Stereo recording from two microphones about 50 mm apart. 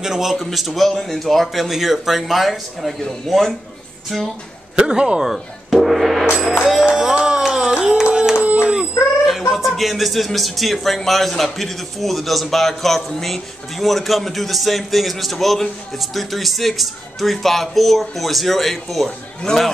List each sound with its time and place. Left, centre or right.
0.0 s speech: centre
4.7 s speech: centre
5.2 s gong: centre
6.6 s music: centre
7.5 s a sound: centre
9.5 s speech: centre
19.5 s a man's voice: centre